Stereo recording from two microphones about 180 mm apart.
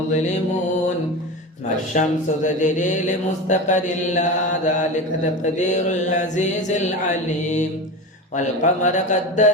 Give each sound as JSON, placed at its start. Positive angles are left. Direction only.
{"t": 1.9, "sound": "mantra", "side_deg": 45}
{"t": 8.4, "sound": "mantra", "side_deg": 45}